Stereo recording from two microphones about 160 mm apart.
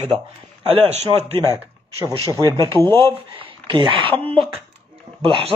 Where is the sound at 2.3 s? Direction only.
20° right (ahead or behind).